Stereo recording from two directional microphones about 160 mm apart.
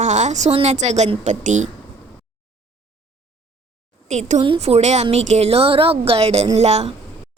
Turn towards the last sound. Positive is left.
turn(degrees=-40)  # may be behind; listen again after turning